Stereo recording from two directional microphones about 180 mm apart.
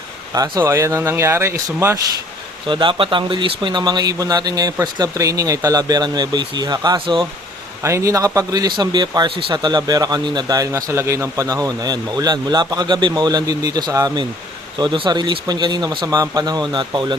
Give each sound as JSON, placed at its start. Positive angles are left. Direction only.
{"t": 0.3, "sound": "speech", "side_deg": -20}
{"t": 2.6, "sound": "a man's voice", "side_deg": -25}
{"t": 7.8, "sound": "a man's voice", "side_deg": -15}